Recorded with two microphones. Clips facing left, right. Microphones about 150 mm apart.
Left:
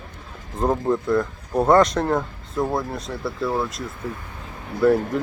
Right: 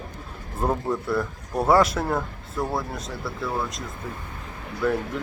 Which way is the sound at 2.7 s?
Centre (ahead or behind).